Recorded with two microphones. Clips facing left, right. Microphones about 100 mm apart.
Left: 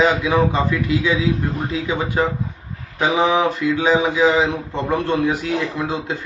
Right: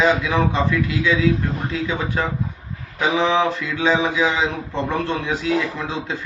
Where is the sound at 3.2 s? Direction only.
15° left (ahead or behind).